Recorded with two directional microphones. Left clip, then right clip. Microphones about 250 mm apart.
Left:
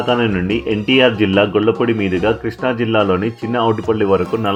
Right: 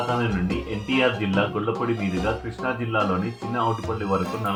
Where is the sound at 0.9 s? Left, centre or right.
Left.